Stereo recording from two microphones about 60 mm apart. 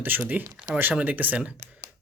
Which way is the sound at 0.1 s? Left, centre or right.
Right.